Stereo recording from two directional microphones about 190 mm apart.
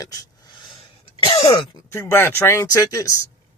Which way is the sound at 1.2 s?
35° left (ahead or behind).